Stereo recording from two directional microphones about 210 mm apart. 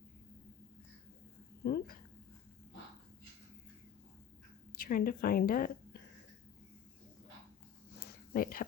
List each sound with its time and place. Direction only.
1.6 s a sound: 45° left (ahead or behind)
4.7 s a woman's voice: 45° left (ahead or behind)
8.3 s speech: 45° left (ahead or behind)